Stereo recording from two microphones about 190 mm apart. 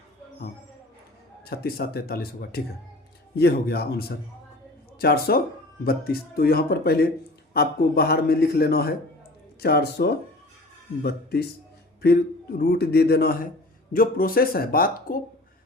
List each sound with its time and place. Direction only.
1.5 s a man's voice: 55° left (ahead or behind)